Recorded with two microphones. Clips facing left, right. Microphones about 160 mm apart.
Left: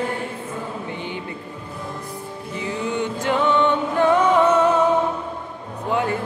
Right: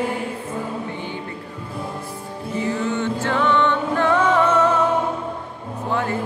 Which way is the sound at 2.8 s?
15° left (ahead or behind).